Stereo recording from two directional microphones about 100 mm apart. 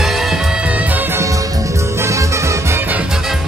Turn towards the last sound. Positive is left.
turn(degrees=-20)  # may be behind; listen again after turning